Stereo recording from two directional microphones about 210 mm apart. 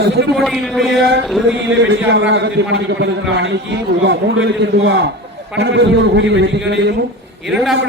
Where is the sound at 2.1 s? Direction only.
60° right (ahead or behind).